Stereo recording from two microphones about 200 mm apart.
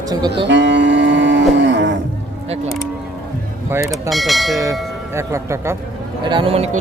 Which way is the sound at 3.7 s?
15° right (ahead or behind).